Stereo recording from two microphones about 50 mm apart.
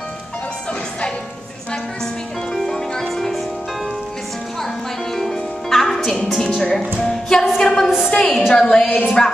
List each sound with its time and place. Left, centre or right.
2.5 s music: centre
5.1 s music: centre
7.5 s a sound: centre
8.1 s a woman's voice: centre